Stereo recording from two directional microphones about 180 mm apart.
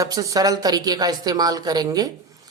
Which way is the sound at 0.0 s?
20° right (ahead or behind).